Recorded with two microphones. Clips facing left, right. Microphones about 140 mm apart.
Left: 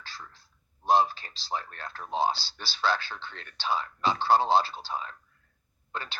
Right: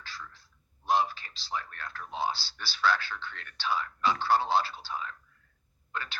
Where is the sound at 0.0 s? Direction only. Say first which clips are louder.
Right 1 dB; 30° left (ahead or behind).